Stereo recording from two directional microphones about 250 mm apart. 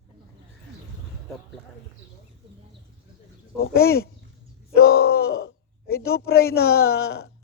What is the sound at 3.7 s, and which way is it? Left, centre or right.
Speech, left.